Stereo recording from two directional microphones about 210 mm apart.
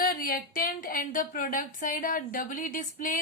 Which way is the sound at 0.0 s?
45° left (ahead or behind).